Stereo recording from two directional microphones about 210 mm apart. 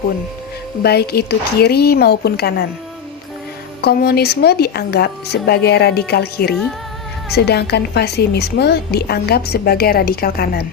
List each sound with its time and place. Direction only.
0.8 s a woman's voice: 50° left (ahead or behind)
3.8 s a woman's voice: 50° left (ahead or behind)